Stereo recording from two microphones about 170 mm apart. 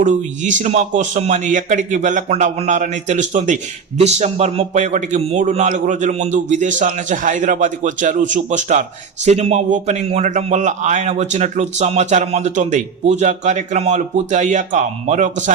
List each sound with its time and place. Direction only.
0.0 s a man's voice: 45° right (ahead or behind)